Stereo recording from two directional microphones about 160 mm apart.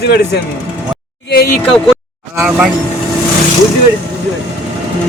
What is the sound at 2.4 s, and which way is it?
Speech, 5° right (ahead or behind).